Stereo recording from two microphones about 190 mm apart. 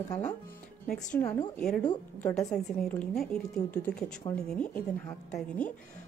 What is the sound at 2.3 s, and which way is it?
A woman's voice, 5° left (ahead or behind).